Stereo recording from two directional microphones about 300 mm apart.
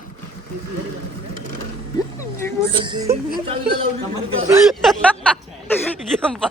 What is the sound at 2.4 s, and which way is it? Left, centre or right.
Speech, centre.